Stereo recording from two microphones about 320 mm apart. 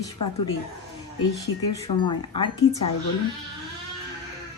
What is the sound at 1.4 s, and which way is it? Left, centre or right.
Speech, centre.